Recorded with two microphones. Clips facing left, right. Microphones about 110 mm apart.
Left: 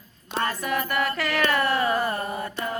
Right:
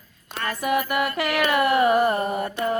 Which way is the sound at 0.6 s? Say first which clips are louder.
Right 7 dB; 10° right (ahead or behind).